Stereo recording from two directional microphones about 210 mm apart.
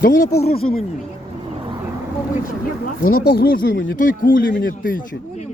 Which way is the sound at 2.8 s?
45° left (ahead or behind).